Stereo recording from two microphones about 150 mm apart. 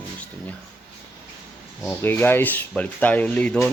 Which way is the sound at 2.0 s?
15° left (ahead or behind).